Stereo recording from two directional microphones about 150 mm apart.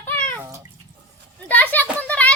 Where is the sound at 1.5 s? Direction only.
10° left (ahead or behind).